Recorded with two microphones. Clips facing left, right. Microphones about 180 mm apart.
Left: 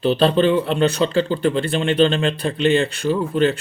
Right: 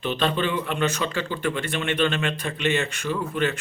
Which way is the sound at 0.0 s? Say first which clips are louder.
Left 9 dB; 35° left (ahead or behind).